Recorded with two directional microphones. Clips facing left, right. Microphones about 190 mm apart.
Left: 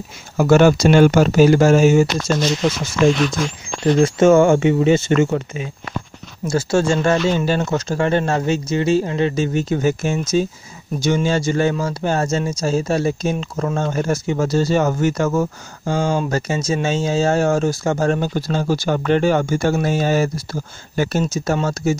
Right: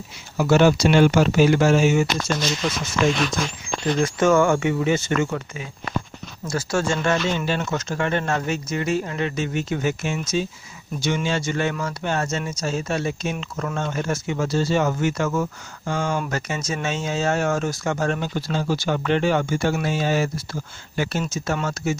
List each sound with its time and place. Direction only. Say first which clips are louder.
0.4 s speech: left 4 dB; 50° left (ahead or behind)
4.0 s speech: left 6 dB; 25° left (ahead or behind)